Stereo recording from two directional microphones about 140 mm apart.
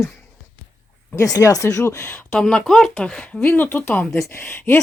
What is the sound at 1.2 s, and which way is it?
Speech, 25° left (ahead or behind).